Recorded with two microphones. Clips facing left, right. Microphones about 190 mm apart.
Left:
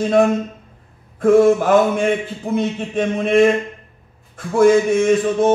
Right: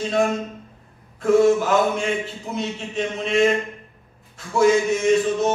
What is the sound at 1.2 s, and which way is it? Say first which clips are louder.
A man's voice: left 4 dB; 55° left (ahead or behind).